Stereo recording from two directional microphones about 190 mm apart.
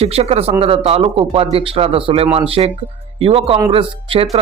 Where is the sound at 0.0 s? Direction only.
30° right (ahead or behind).